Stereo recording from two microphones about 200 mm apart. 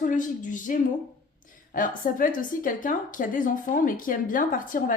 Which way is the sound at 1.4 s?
40° left (ahead or behind).